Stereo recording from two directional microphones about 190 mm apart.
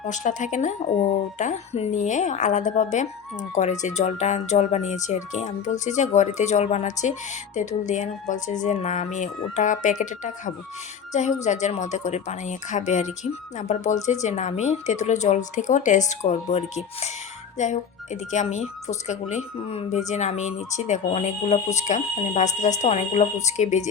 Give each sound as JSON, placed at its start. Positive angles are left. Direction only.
{"t": 0.0, "sound": "speech", "side_deg": 40}